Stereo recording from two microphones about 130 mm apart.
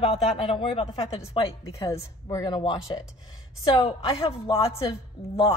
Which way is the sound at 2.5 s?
35° left (ahead or behind).